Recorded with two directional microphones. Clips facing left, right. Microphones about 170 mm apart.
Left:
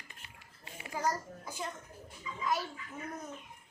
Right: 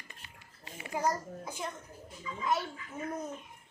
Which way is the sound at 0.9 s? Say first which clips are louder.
Right 2 dB; 20° right (ahead or behind).